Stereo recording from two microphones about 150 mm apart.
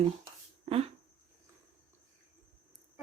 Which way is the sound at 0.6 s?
40° right (ahead or behind).